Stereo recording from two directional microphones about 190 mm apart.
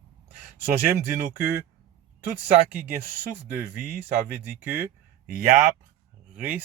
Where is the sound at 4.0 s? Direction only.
10° right (ahead or behind).